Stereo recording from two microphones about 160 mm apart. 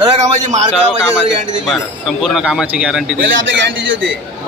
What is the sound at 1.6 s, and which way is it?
Speech, centre (ahead or behind).